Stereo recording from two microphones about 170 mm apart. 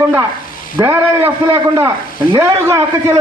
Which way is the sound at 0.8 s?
10° right (ahead or behind).